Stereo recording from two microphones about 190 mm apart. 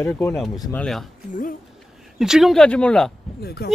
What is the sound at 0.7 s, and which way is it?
Mantra, 5° left (ahead or behind).